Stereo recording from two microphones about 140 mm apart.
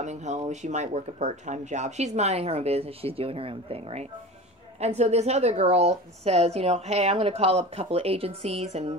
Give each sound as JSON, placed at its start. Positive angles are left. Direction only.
{"t": 0.0, "sound": "a woman's voice", "side_deg": -55}